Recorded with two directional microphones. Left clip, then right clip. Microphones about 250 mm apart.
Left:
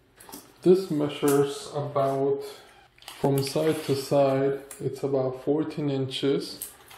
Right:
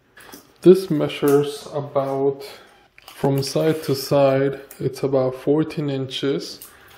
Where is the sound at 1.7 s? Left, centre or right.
Right.